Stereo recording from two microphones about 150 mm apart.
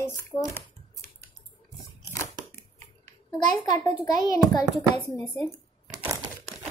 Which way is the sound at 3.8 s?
20° left (ahead or behind).